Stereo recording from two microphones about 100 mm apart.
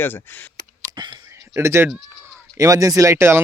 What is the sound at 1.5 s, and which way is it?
Speech, 25° right (ahead or behind).